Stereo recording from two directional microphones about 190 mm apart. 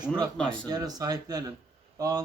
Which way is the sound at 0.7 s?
20° right (ahead or behind).